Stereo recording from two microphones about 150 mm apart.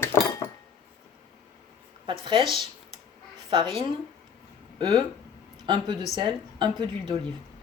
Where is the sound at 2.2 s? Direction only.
30° right (ahead or behind).